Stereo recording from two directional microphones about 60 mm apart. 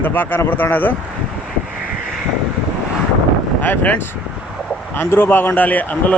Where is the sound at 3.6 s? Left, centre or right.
Left.